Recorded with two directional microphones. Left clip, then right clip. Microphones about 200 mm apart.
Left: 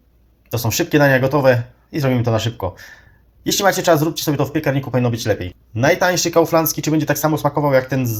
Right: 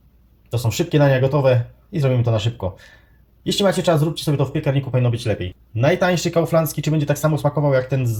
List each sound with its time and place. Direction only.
0.5 s speech: 15° left (ahead or behind)